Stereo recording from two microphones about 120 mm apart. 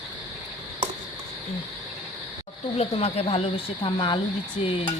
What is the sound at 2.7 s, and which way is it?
Speech, 60° left (ahead or behind).